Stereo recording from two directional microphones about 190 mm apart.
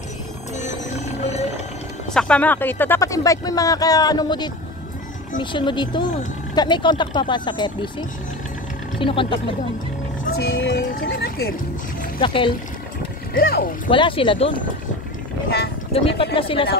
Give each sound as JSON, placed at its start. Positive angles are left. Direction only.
{"t": 0.6, "sound": "music", "side_deg": 40}
{"t": 2.1, "sound": "speech", "side_deg": 5}
{"t": 9.0, "sound": "speech", "side_deg": 25}
{"t": 10.3, "sound": "speech", "side_deg": 70}
{"t": 10.9, "sound": "a sound", "side_deg": 50}
{"t": 12.2, "sound": "speech", "side_deg": 25}
{"t": 13.3, "sound": "speech", "side_deg": 50}
{"t": 13.8, "sound": "speech", "side_deg": 25}
{"t": 15.9, "sound": "speech", "side_deg": 30}